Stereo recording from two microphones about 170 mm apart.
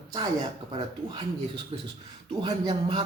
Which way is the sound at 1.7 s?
35° right (ahead or behind).